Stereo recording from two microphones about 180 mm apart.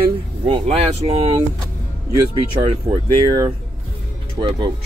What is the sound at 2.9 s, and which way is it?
Speech, 10° right (ahead or behind).